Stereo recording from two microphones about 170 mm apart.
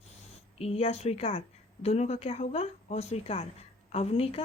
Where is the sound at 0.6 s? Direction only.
35° left (ahead or behind).